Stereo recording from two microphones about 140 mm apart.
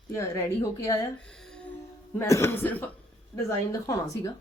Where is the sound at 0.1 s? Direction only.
20° left (ahead or behind).